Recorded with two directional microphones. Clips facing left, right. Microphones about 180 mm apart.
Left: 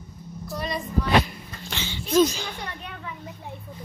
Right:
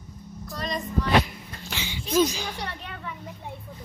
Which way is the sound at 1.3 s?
10° right (ahead or behind).